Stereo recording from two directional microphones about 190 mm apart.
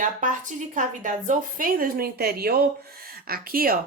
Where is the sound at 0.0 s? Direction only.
40° right (ahead or behind).